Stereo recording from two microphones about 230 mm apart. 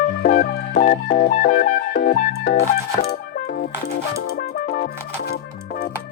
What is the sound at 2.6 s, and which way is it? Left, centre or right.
Music, left.